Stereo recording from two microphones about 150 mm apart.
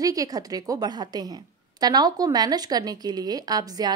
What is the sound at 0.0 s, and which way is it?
A woman's voice, 25° right (ahead or behind).